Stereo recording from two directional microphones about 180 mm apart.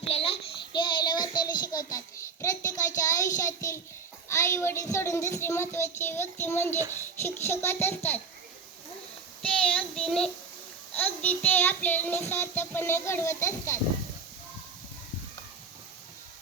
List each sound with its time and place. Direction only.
0.0 s child singing: 30° left (ahead or behind); by 3.8 s 15° left (ahead or behind)
4.3 s speech: 15° left (ahead or behind)
9.4 s child singing: 5° left (ahead or behind)
10.9 s speech: 10° left (ahead or behind)